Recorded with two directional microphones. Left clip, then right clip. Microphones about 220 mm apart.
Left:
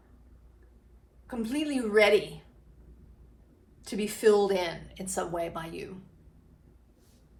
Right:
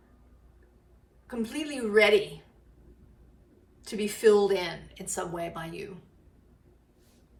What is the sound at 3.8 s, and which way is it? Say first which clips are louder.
Speech: right 1 dB; 15° left (ahead or behind).